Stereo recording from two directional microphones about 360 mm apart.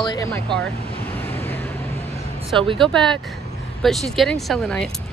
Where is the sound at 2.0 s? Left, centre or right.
Centre.